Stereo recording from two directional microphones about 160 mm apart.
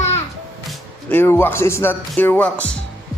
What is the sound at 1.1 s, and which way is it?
Speech, 15° left (ahead or behind).